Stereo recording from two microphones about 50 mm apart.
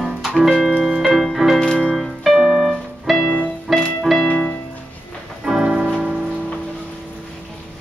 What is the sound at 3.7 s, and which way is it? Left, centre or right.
Music, centre.